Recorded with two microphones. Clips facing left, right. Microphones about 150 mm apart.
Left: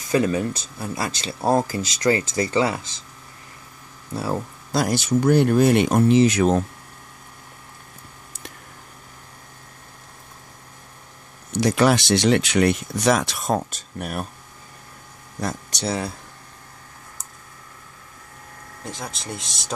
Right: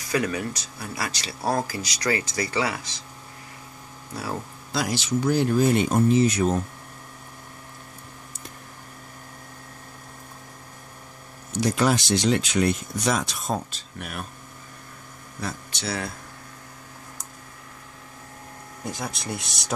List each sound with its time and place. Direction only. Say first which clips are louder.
0.1 s speech: left 5 dB; 25° left (ahead or behind)
4.1 s speech: left 6 dB; 25° left (ahead or behind)
4.7 s speech: left 5 dB; 50° left (ahead or behind); by 6.6 s 85° left
11.5 s speech: left 4 dB; 70° left (ahead or behind)
13.6 s speech: left 5 dB; 45° left (ahead or behind)
18.9 s speech: right 1 dB; centre (ahead or behind)